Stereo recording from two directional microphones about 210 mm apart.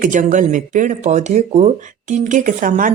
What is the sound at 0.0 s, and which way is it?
Speech, 35° right (ahead or behind).